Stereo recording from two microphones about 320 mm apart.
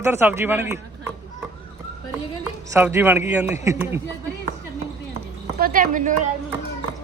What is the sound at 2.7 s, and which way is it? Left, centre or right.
A man's voice, centre.